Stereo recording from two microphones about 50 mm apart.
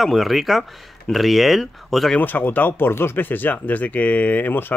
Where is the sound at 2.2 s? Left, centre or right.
Left.